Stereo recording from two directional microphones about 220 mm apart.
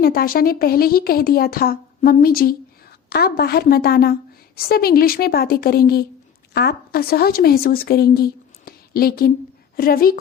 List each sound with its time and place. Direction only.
0.0 s a woman's voice: 40° left (ahead or behind)